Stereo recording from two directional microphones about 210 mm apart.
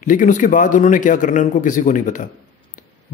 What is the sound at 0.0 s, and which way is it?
A man's voice, 40° left (ahead or behind).